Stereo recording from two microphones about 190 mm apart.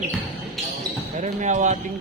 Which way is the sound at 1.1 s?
40° right (ahead or behind).